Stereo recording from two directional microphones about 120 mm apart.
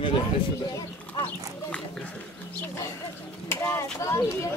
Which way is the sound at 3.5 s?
25° left (ahead or behind).